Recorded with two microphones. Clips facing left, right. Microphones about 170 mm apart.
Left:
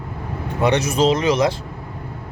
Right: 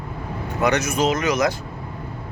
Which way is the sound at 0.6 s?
30° left (ahead or behind).